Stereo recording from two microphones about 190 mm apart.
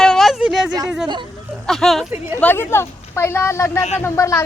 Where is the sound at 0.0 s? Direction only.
Centre (ahead or behind).